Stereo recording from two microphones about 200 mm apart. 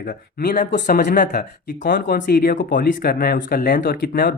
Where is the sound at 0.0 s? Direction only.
45° left (ahead or behind).